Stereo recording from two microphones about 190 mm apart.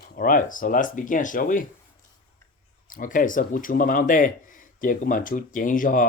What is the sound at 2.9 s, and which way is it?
Speech, 45° left (ahead or behind).